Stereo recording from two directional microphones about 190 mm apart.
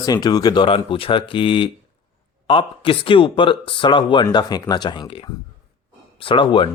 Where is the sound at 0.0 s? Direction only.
20° left (ahead or behind).